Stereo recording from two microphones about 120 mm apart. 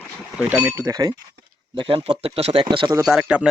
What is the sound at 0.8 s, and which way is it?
Speech, 30° right (ahead or behind).